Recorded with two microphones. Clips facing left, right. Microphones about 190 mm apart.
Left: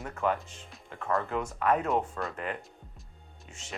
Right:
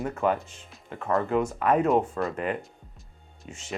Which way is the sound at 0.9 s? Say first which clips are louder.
Right 5 dB; 20° right (ahead or behind).